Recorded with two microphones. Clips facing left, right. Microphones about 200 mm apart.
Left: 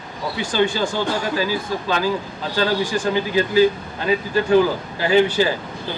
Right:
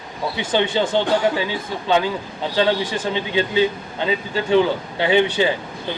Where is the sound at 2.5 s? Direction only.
20° right (ahead or behind).